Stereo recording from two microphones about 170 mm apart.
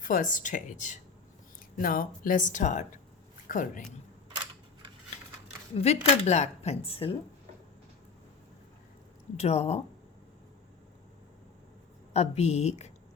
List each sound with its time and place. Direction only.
0.0 s speech: 50° left (ahead or behind)
1.7 s speech: 55° left (ahead or behind)
5.7 s speech: 40° left (ahead or behind)
9.4 s speech: 40° left (ahead or behind)
12.1 s speech: 40° left (ahead or behind)